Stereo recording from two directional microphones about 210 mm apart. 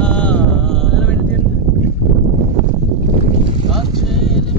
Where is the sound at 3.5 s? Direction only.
25° right (ahead or behind).